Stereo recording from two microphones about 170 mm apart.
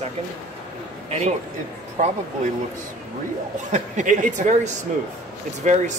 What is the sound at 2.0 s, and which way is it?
Speech, 55° right (ahead or behind).